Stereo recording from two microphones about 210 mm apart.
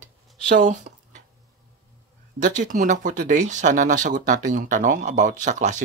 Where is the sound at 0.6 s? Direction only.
35° right (ahead or behind).